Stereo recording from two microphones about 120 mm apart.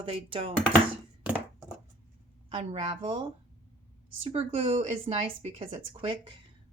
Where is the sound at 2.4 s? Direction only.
60° right (ahead or behind).